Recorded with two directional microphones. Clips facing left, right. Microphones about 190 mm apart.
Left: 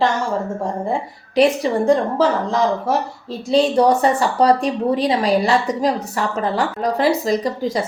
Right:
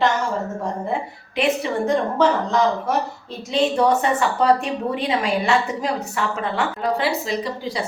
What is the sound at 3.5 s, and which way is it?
A woman's voice, 35° left (ahead or behind).